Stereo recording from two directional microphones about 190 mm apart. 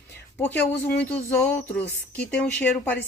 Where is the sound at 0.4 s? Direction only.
10° left (ahead or behind).